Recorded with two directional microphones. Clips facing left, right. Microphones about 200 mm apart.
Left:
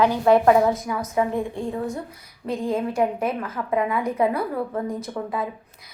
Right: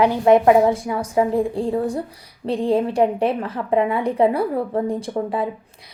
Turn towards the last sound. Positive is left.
turn(degrees=-30)  # may be behind; listen again after turning